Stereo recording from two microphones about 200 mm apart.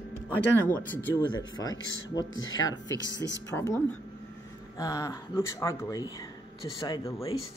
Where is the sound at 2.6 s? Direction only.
20° left (ahead or behind).